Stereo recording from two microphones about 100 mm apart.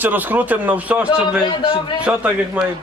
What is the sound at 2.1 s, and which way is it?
Speech, 15° right (ahead or behind).